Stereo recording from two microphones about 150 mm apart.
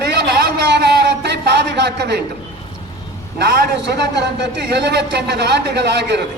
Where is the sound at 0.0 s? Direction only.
90° right.